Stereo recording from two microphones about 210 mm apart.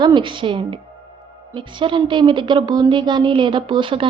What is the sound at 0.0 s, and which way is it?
A woman's voice, 20° right (ahead or behind).